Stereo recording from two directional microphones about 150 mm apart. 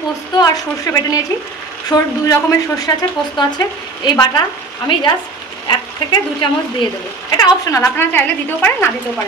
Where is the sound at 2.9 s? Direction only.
20° left (ahead or behind).